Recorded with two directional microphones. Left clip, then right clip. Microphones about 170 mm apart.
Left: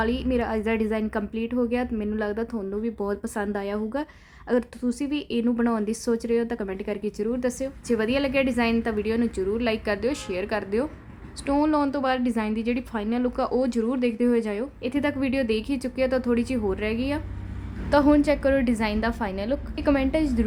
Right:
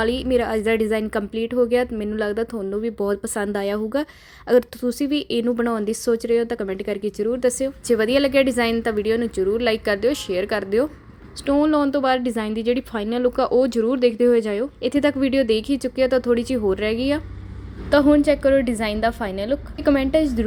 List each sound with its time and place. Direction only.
0.0 s a woman's voice: 20° right (ahead or behind)
18.0 s a woman's voice: 10° right (ahead or behind)